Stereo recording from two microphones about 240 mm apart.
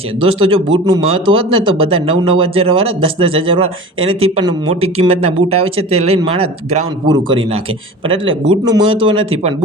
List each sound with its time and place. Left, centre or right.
0.2 s speech: right